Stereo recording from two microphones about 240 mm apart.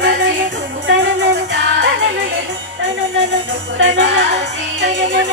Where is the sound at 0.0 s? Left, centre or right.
Right.